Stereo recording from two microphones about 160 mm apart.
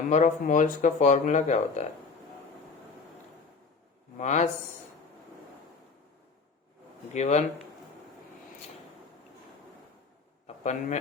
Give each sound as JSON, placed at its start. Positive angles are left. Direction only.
{"t": 0.1, "sound": "speech", "side_deg": 50}
{"t": 4.2, "sound": "speech", "side_deg": 50}
{"t": 7.1, "sound": "speech", "side_deg": 45}
{"t": 10.4, "sound": "a sound", "side_deg": 45}